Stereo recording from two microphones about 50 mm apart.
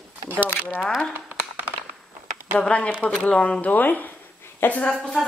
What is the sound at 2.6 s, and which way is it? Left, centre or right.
Speech, left.